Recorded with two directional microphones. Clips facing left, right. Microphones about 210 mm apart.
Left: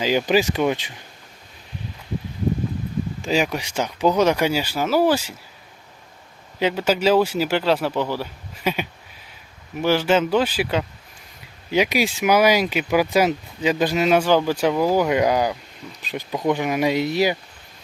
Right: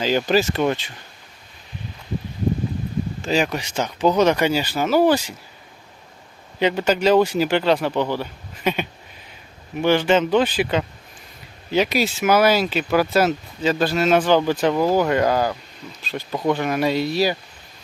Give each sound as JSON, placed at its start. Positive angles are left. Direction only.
{"t": 0.0, "sound": "speech", "side_deg": 10}
{"t": 3.2, "sound": "speech", "side_deg": 10}
{"t": 6.6, "sound": "speech", "side_deg": 5}